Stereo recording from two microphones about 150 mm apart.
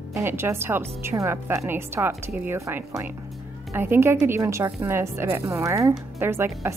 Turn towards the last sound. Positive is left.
turn(degrees=-15)  # may be behind; listen again after turning